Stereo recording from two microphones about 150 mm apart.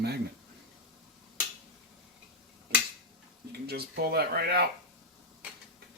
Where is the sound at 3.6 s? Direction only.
90° right.